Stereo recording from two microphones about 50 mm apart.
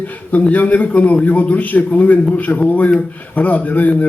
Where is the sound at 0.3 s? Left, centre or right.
Left.